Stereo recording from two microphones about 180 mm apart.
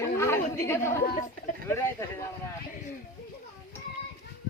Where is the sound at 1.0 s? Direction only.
55° left (ahead or behind).